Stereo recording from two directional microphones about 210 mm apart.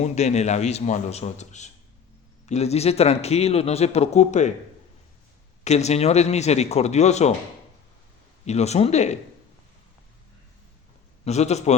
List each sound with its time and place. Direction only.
0.0 s a man's voice: 30° left (ahead or behind)
5.6 s a man's voice: 30° left (ahead or behind)
8.4 s a man's voice: 30° left (ahead or behind)
11.3 s a man's voice: 30° left (ahead or behind)